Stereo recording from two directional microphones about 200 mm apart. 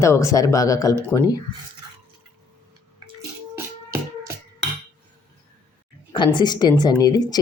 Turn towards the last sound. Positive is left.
turn(degrees=20)  # may be behind; listen again after turning